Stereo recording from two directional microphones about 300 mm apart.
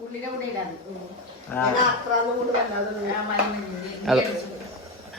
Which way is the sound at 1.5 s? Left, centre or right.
Centre.